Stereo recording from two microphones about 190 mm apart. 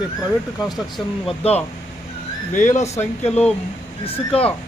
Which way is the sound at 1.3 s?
30° left (ahead or behind).